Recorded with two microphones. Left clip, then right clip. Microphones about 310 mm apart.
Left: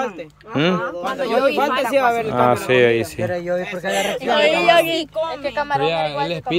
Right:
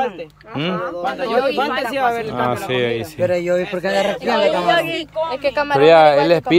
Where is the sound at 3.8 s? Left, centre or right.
Left.